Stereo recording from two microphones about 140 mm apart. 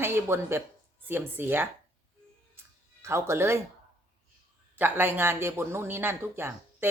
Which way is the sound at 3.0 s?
20° right (ahead or behind).